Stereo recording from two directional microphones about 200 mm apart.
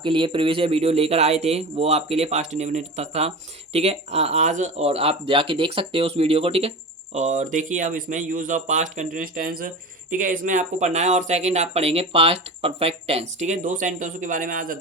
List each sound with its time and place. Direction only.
0.0 s speech: 25° right (ahead or behind); by 14.8 s 45° right (ahead or behind)